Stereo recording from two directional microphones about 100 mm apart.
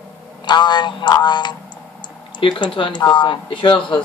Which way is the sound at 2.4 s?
60° left (ahead or behind).